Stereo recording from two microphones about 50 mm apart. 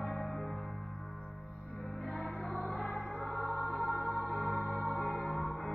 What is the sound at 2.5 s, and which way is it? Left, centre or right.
Music, centre.